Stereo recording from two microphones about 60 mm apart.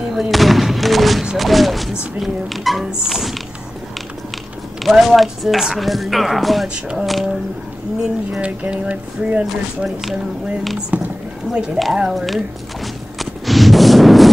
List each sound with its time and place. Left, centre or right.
0.1 s speech: centre
4.8 s speech: centre
6.7 s a sound: centre
7.1 s speech: centre
8.4 s speech: centre
10.9 s speech: right
11.5 s a sound: centre